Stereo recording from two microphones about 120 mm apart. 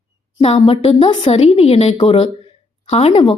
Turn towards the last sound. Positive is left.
turn(degrees=55)  # may be behind; listen again after turning